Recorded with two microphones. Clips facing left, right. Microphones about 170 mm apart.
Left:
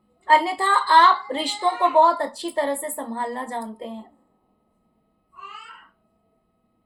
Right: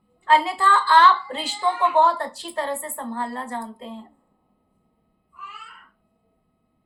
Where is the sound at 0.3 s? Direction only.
35° left (ahead or behind).